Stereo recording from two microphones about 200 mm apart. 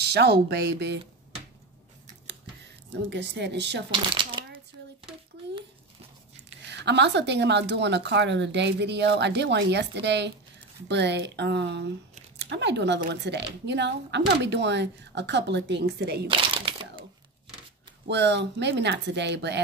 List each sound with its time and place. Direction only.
0.0 s speech: 55° right (ahead or behind)
3.1 s speech: 60° right (ahead or behind)
3.9 s speech: 25° right (ahead or behind)
6.7 s speech: 60° right (ahead or behind)
16.3 s crumpling: 25° right (ahead or behind)
18.0 s speech: 60° right (ahead or behind)